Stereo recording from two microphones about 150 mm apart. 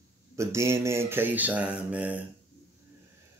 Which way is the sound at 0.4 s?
20° right (ahead or behind).